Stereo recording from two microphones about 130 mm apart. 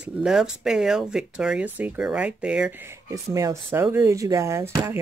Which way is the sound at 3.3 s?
25° right (ahead or behind).